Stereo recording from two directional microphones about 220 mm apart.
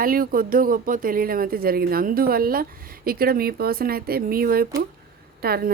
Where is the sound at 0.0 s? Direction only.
40° right (ahead or behind).